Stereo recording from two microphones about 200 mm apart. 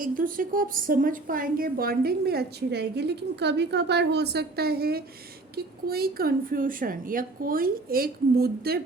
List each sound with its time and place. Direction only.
0.0 s a woman's voice: 45° right (ahead or behind)